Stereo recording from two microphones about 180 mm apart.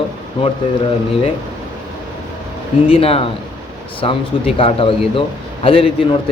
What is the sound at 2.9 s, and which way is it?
A man's voice, 30° left (ahead or behind).